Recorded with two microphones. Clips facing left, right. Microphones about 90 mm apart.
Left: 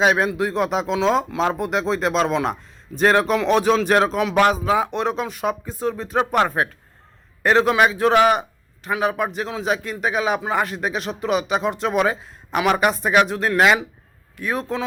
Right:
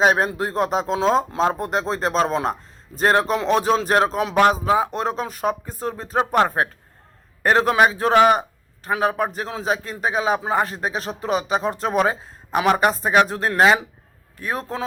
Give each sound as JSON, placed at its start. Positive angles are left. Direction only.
{"t": 0.0, "sound": "speech", "side_deg": -40}